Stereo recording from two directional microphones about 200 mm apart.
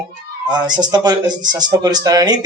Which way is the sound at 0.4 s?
20° right (ahead or behind).